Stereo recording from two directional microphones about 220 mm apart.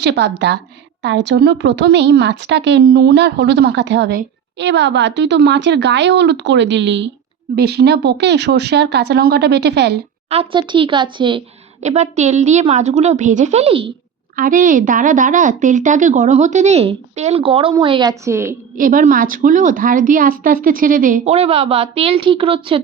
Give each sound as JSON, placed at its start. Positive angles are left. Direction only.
{"t": 0.0, "sound": "speech", "side_deg": -50}
{"t": 10.2, "sound": "a woman's voice", "side_deg": -25}
{"t": 14.3, "sound": "a woman's voice", "side_deg": -40}
{"t": 18.8, "sound": "a woman's voice", "side_deg": -40}